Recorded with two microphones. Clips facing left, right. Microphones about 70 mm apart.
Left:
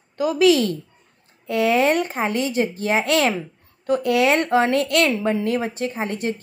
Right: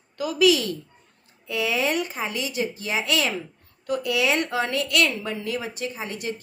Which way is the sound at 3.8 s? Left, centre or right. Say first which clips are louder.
Left 6 dB; left.